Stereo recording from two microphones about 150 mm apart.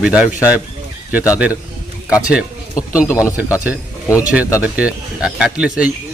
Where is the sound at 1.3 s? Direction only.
10° right (ahead or behind).